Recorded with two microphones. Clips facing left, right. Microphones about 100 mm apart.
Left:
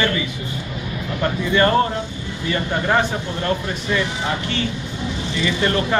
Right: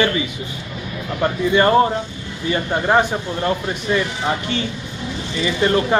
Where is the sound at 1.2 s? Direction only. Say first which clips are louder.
Right 2 dB; 20° right (ahead or behind).